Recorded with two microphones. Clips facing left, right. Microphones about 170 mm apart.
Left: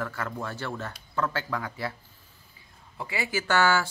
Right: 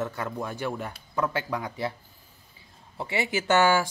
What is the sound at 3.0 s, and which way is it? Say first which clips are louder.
Speech: right 3 dB; 25° right (ahead or behind).